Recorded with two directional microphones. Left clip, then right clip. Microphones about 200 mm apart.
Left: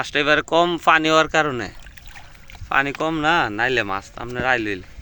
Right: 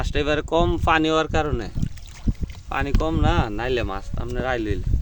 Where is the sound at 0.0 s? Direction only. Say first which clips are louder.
Left 5 dB; 5° right (ahead or behind).